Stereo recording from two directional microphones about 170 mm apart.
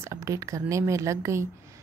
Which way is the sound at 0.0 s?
15° right (ahead or behind).